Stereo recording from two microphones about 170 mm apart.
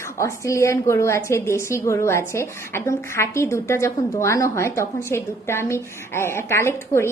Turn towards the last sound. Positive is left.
turn(degrees=15)  # may be behind; listen again after turning